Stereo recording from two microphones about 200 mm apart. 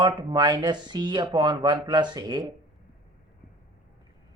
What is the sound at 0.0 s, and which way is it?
Speech, 20° right (ahead or behind).